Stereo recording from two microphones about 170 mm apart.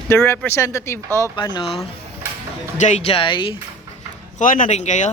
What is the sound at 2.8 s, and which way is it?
Speech, 40° left (ahead or behind).